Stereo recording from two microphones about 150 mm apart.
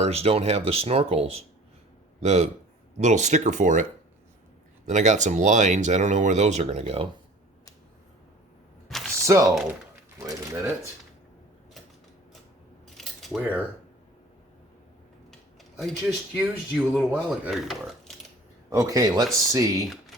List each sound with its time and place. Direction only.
0.0 s speech: 40° right (ahead or behind); by 3.8 s 55° right (ahead or behind)
4.9 s speech: 55° right (ahead or behind)
8.9 s a sound: centre (ahead or behind)
9.2 s speech: 20° right (ahead or behind)
13.0 s cutlery: centre (ahead or behind)
15.8 s speech: centre (ahead or behind)
18.7 s speech: 20° right (ahead or behind)